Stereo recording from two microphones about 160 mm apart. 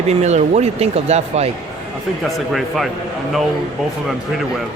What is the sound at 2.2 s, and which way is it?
Speech, centre (ahead or behind).